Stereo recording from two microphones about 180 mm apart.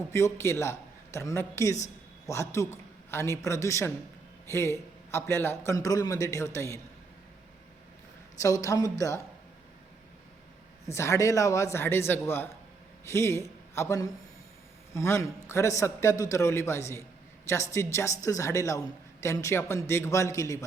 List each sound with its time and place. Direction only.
0.1 s a man's voice: 15° left (ahead or behind)
8.4 s speech: 20° left (ahead or behind)
10.8 s a man's voice: 15° left (ahead or behind)